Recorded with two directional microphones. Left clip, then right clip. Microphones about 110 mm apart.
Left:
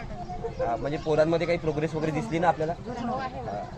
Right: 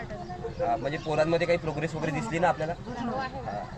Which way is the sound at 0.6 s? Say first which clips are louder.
Even; 15° left (ahead or behind).